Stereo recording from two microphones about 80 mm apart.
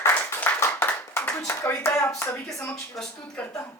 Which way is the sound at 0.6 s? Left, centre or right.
Left.